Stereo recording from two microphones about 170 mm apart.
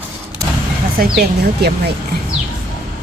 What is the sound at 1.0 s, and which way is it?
Speech, 70° right (ahead or behind).